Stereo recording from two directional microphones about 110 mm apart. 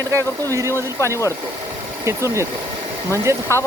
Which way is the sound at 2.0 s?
25° right (ahead or behind).